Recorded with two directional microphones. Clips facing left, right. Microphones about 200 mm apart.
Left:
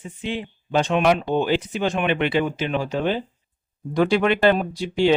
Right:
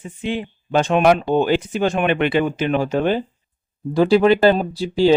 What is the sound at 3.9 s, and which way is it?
Speech, 35° right (ahead or behind).